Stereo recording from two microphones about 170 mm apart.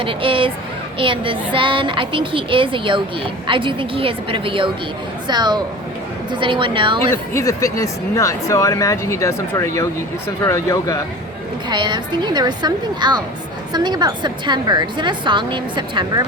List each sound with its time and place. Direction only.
0.0 s a woman's voice: 30° right (ahead or behind)
7.1 s speech: 15° left (ahead or behind)
11.7 s a woman's voice: 25° right (ahead or behind)